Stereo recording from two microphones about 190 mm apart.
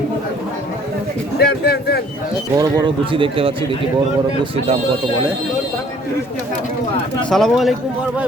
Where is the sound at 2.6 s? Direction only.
20° right (ahead or behind).